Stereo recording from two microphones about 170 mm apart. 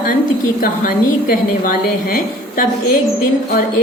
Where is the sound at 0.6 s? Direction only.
55° left (ahead or behind).